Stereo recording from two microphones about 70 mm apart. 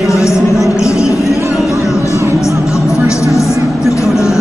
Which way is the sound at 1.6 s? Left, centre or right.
Left.